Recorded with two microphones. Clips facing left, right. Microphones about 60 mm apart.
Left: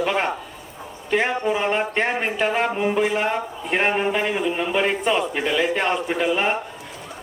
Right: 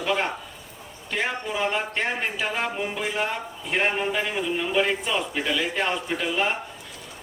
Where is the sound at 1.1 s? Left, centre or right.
Left.